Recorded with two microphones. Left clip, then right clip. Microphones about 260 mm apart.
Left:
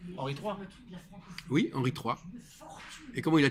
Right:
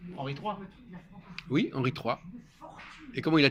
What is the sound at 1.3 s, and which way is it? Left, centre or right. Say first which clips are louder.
A man's voice: right 1 dB; left.